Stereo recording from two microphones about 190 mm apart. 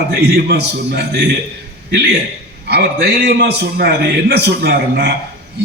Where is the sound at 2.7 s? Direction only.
55° right (ahead or behind).